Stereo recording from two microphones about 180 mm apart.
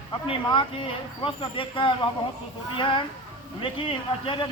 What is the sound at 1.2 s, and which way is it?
Speech, 30° left (ahead or behind).